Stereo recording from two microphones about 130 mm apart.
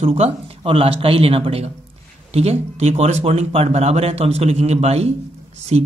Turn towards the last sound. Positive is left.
turn(degrees=-55)  # may be behind; listen again after turning